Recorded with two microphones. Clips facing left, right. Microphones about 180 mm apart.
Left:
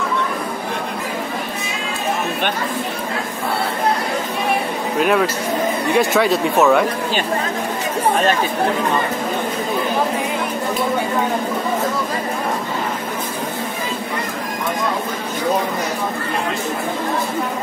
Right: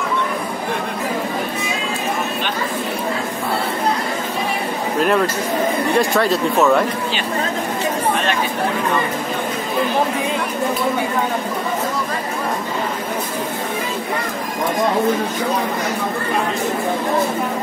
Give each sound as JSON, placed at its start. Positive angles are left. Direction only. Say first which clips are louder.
{"t": 5.0, "sound": "speech", "louder": "even", "side_deg": 5}